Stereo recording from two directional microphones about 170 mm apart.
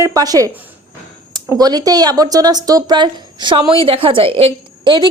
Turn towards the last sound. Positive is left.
turn(degrees=-30)  # may be behind; listen again after turning